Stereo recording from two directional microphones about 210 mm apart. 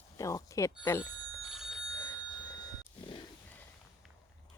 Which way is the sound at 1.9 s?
15° left (ahead or behind).